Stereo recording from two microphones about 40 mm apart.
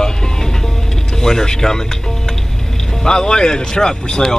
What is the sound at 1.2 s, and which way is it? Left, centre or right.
Speech, centre.